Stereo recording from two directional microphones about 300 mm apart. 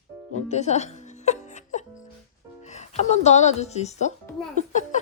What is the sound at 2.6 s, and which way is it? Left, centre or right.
Speech, left.